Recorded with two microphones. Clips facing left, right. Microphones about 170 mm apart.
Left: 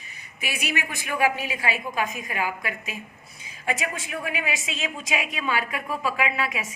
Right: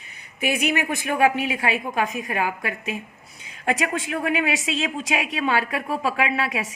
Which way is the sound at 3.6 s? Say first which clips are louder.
Right 5 dB; 70° right (ahead or behind).